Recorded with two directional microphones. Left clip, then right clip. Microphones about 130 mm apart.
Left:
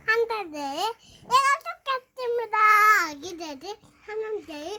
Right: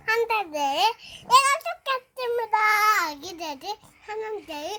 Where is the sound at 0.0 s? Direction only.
20° right (ahead or behind).